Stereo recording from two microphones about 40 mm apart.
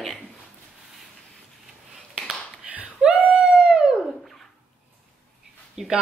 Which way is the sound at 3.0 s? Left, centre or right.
Right.